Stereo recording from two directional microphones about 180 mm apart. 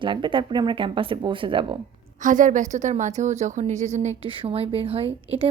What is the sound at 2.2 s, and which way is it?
A woman's voice, 45° right (ahead or behind).